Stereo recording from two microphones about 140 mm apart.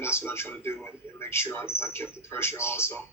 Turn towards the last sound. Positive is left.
turn(degrees=15)  # may be behind; listen again after turning